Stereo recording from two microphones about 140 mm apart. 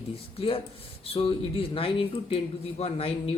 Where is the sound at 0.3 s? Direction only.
40° left (ahead or behind).